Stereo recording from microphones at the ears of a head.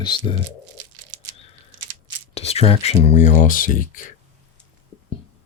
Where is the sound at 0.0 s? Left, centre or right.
Left.